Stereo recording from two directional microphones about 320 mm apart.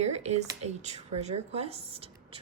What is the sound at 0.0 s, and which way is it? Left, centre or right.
A woman's voice, right.